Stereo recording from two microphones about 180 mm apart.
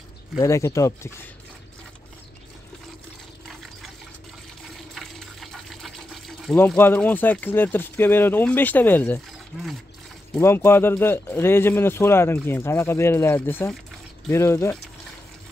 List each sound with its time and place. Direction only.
0.4 s speech: 15° left (ahead or behind)
3.4 s water: centre (ahead or behind)
4.9 s speech: centre (ahead or behind)
9.5 s speech: centre (ahead or behind)
10.3 s speech: 15° left (ahead or behind)